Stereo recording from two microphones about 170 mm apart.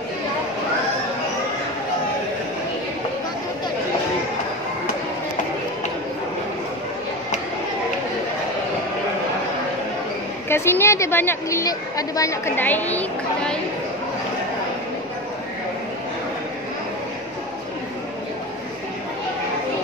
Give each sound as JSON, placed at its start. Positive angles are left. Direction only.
{"t": 10.5, "sound": "a woman's voice", "side_deg": 15}